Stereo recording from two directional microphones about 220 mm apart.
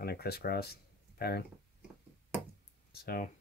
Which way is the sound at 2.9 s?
45° left (ahead or behind).